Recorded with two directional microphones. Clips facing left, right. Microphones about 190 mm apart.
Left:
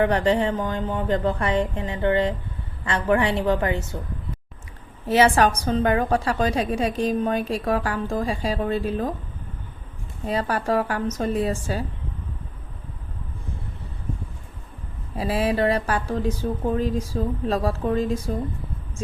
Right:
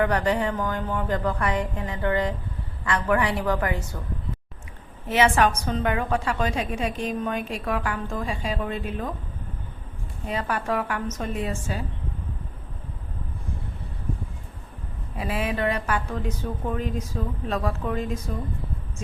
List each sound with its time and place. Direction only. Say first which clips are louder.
0.0 s a woman's voice: left 3 dB; 25° left (ahead or behind)
5.0 s a woman's voice: left 3 dB; 35° left (ahead or behind)
10.2 s a woman's voice: left 4 dB; 35° left (ahead or behind)
15.2 s a woman's voice: left 5 dB; 35° left (ahead or behind)